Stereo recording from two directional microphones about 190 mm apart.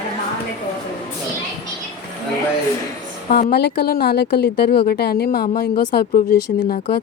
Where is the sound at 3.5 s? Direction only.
60° left (ahead or behind).